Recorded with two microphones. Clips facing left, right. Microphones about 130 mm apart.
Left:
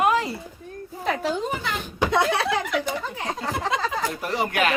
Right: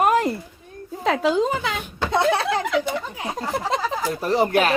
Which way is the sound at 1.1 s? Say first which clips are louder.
Right 6 dB; 90° right.